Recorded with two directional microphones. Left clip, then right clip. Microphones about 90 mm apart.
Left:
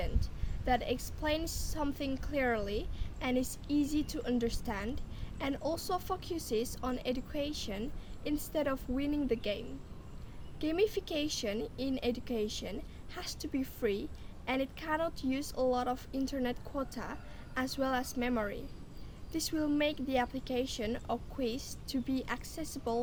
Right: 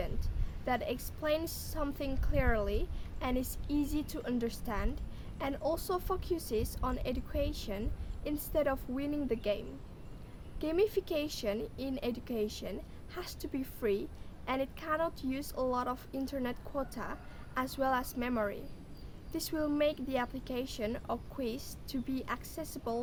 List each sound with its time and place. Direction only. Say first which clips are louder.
0.0 s a woman's voice: even; 30° right (ahead or behind)